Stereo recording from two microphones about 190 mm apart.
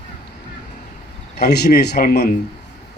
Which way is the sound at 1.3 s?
60° left (ahead or behind).